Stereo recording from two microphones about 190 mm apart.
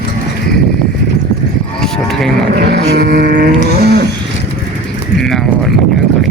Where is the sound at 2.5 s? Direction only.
60° right (ahead or behind).